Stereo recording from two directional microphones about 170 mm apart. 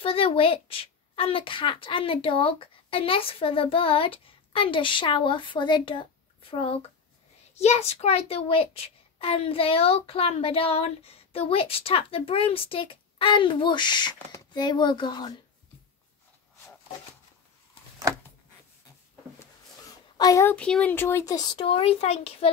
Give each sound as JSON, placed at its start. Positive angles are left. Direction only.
{"t": 0.0, "sound": "a child's voice", "side_deg": 35}
{"t": 20.2, "sound": "speech", "side_deg": 20}
{"t": 20.5, "sound": "speech", "side_deg": 5}